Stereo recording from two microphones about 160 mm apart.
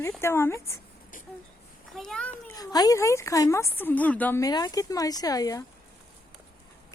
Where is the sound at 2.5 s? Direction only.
25° left (ahead or behind).